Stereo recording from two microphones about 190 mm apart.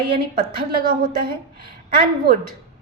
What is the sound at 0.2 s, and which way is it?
A woman's voice, 50° right (ahead or behind).